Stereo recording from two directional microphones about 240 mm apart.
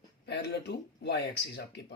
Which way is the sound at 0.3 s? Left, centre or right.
Left.